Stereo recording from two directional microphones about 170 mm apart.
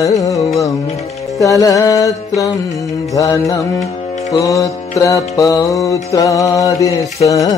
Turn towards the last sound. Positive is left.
turn(degrees=20)  # may be behind; listen again after turning